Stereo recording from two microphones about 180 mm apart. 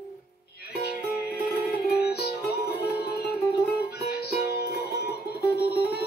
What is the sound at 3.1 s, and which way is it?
Music, 60° left (ahead or behind).